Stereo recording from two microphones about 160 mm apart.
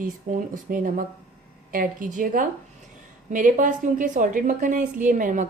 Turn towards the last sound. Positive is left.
turn(degrees=-55)  # may be behind; listen again after turning